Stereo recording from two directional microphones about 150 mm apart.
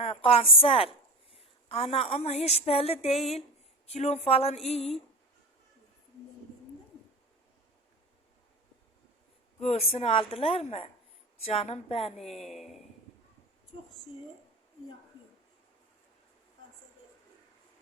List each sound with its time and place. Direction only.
0.0 s a woman's voice: 40° left (ahead or behind)
9.6 s a woman's voice: 45° left (ahead or behind)
12.1 s speech: centre (ahead or behind)